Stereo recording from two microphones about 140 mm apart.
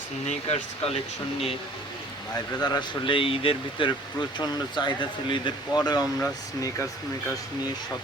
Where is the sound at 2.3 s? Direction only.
30° left (ahead or behind).